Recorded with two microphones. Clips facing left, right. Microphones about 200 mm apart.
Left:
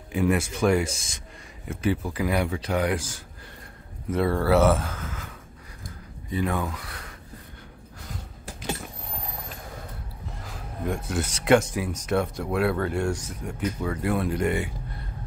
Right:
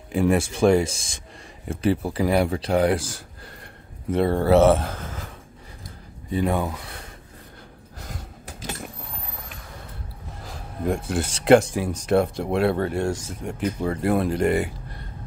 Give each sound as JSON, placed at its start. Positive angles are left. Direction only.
{"t": 0.1, "sound": "speech", "side_deg": -30}
{"t": 6.3, "sound": "speech", "side_deg": -30}
{"t": 10.9, "sound": "speech", "side_deg": -30}